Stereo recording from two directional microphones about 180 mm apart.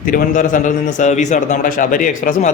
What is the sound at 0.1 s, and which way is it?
A man's voice, 50° left (ahead or behind).